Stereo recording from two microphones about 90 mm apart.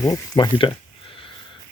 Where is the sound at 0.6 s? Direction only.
60° left (ahead or behind).